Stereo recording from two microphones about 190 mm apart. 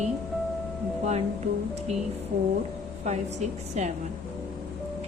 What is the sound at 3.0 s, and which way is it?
Speech, 35° right (ahead or behind).